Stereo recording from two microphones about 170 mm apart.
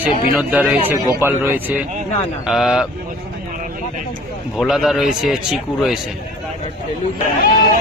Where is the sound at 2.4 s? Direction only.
Centre (ahead or behind).